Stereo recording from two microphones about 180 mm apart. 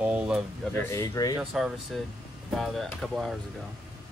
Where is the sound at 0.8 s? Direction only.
15° left (ahead or behind).